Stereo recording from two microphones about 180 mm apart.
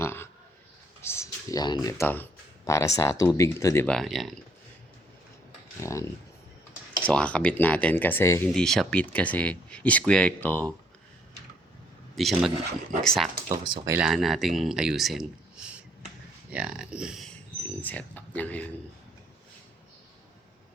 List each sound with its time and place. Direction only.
0.0 s a sound: 15° left (ahead or behind)
1.0 s speech: 15° left (ahead or behind)
3.8 s speech: centre (ahead or behind)
5.8 s speech: 15° left (ahead or behind)
8.5 s speech: 5° left (ahead or behind)
12.1 s speech: centre (ahead or behind)
13.5 s speech: 20° right (ahead or behind)
14.0 s speech: centre (ahead or behind)
16.5 s speech: 5° right (ahead or behind)
17.7 s speech: 10° left (ahead or behind)